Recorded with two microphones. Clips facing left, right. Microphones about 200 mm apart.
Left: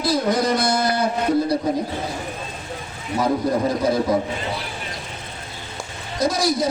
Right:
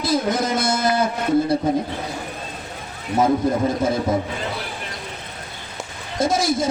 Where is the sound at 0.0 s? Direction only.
25° right (ahead or behind).